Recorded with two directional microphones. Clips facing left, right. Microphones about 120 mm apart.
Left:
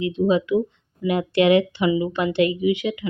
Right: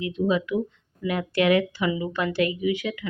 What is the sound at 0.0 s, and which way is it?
Speech, 25° left (ahead or behind).